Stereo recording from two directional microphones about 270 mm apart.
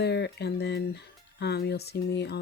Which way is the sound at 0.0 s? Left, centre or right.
Left.